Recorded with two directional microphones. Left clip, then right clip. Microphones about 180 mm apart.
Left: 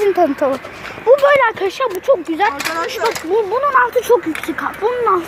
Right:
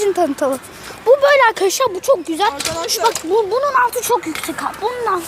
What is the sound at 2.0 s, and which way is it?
Speech, 25° right (ahead or behind).